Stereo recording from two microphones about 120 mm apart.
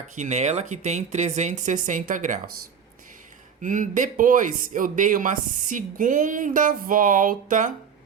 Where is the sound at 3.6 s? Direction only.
90° right.